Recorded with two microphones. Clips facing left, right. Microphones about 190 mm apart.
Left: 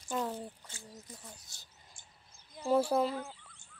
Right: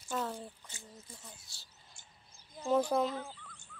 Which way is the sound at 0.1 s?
15° left (ahead or behind).